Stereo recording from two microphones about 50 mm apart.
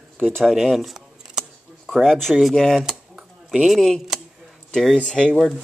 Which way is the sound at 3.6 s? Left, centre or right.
Centre.